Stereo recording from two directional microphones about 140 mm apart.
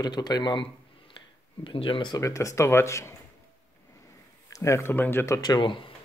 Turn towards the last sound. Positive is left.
turn(degrees=35)  # may be behind; listen again after turning